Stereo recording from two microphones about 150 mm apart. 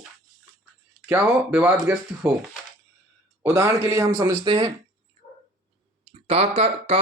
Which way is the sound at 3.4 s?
20° right (ahead or behind).